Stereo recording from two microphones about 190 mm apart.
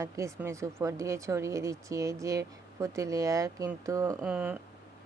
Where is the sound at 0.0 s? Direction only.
15° right (ahead or behind).